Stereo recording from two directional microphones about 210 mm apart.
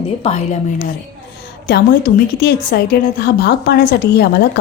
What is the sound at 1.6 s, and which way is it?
A woman's voice, 45° left (ahead or behind).